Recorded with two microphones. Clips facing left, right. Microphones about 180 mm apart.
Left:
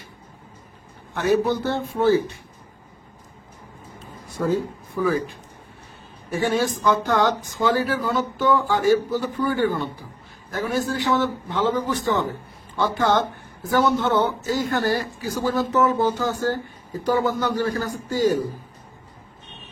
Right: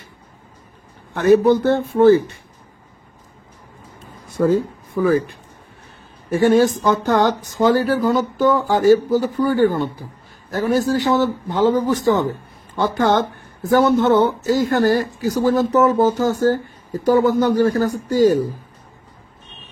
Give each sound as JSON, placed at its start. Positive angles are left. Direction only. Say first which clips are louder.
{"t": 1.1, "sound": "a man's voice", "louder": "right 7 dB", "side_deg": -55}
{"t": 4.9, "sound": "speech", "louder": "right 6 dB", "side_deg": -55}
{"t": 6.3, "sound": "a man's voice", "louder": "right 8 dB", "side_deg": -45}